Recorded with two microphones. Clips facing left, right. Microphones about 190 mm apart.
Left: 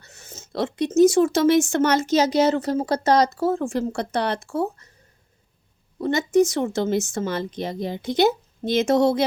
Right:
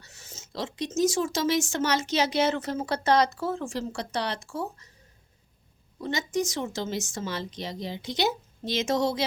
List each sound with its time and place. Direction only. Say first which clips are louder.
0.0 s speech: left 5 dB; 55° left (ahead or behind)
6.0 s speech: left 10 dB; 55° left (ahead or behind)